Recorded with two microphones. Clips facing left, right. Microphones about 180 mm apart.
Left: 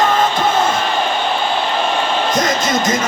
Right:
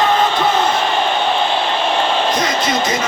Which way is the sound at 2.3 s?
45° left (ahead or behind).